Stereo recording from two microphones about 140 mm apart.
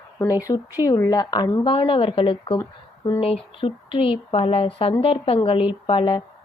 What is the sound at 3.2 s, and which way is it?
A woman's voice, 40° left (ahead or behind).